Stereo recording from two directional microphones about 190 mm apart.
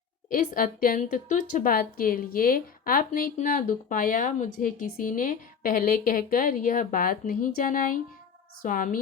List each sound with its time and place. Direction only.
0.3 s a woman's voice: 45° left (ahead or behind)